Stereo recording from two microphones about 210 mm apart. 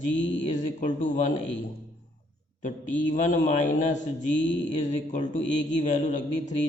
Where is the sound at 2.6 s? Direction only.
35° left (ahead or behind).